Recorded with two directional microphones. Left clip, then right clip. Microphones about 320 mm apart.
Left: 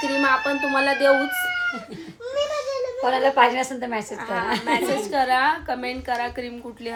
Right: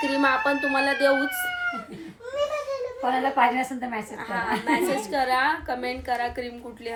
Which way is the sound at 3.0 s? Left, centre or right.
Left.